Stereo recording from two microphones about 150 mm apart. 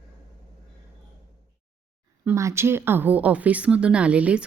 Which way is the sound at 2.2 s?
15° right (ahead or behind).